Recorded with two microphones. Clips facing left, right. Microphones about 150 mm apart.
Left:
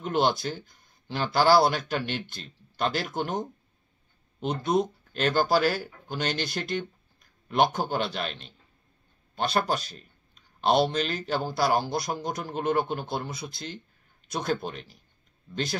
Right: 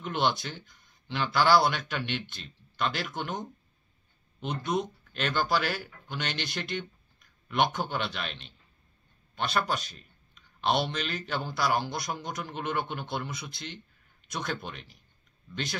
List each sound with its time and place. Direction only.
0.0 s speech: 40° left (ahead or behind)